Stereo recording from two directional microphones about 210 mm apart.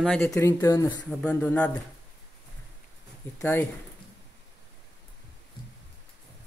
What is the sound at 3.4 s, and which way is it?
Speech, 5° left (ahead or behind).